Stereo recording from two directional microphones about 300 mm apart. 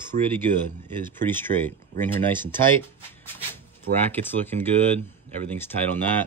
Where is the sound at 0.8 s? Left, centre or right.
Centre.